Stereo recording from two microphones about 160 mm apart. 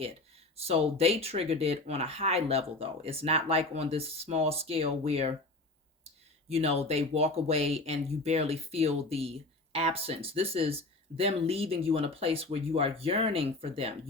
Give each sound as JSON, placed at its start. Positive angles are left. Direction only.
{"t": 0.6, "sound": "speech", "side_deg": -40}
{"t": 6.5, "sound": "speech", "side_deg": -40}